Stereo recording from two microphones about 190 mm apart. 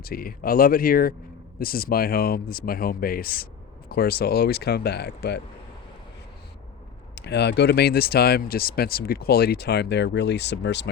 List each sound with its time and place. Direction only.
0.0 s speech: 50° left (ahead or behind)
7.2 s speech: 65° left (ahead or behind)